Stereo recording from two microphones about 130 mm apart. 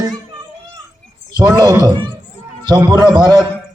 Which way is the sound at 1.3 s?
35° right (ahead or behind).